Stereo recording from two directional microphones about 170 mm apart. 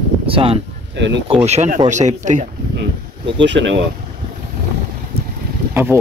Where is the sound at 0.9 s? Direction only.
90° right.